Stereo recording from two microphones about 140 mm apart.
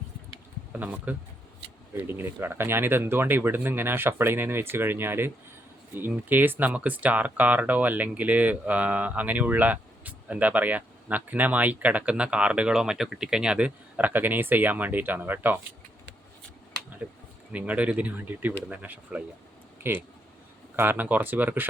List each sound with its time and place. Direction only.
0.7 s speech: 10° right (ahead or behind)
17.5 s speech: 10° right (ahead or behind)
20.7 s speech: 15° right (ahead or behind)